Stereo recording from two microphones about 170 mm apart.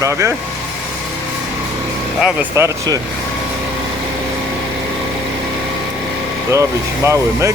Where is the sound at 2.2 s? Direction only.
15° right (ahead or behind).